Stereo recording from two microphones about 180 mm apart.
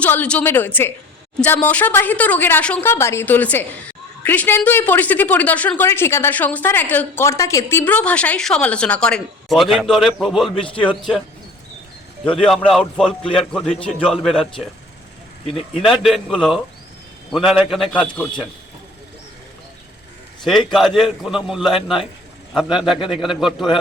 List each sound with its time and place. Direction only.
0.0 s speech: 10° left (ahead or behind)
10.5 s a man's voice: 30° left (ahead or behind)
12.5 s a man's voice: 5° left (ahead or behind)
15.4 s speech: 30° left (ahead or behind)
15.8 s a man's voice: centre (ahead or behind)
20.7 s a man's voice: centre (ahead or behind)